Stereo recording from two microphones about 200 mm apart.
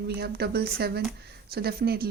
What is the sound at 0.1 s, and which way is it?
Speech, 55° right (ahead or behind).